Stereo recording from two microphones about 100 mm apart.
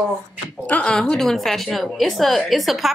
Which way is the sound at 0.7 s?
10° left (ahead or behind).